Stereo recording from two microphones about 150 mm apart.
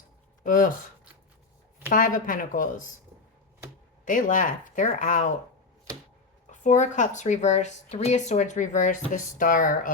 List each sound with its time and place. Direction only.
0.4 s speech: 65° left (ahead or behind)
1.9 s speech: 65° left (ahead or behind)
4.0 s speech: 60° left (ahead or behind)
6.5 s speech: 55° left (ahead or behind)